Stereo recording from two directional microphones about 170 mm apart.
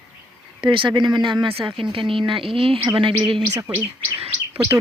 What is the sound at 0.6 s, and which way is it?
Speech, 30° right (ahead or behind).